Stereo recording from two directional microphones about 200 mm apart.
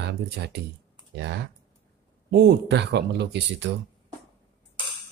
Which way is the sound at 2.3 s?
50° right (ahead or behind).